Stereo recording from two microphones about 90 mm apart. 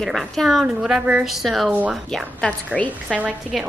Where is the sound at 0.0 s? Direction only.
Centre (ahead or behind).